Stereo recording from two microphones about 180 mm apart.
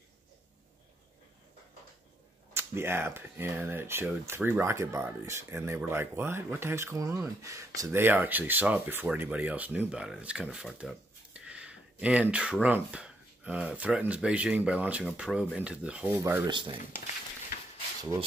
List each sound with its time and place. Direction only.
2.5 s speech: 15° right (ahead or behind)
16.4 s speech: 25° right (ahead or behind)